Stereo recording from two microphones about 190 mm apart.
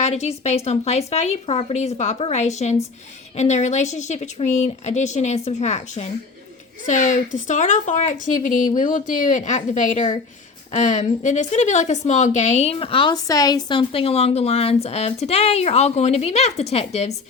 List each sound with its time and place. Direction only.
0.0 s a woman's voice: 35° left (ahead or behind)